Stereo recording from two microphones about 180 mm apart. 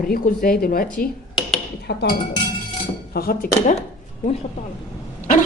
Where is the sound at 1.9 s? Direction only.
65° left (ahead or behind).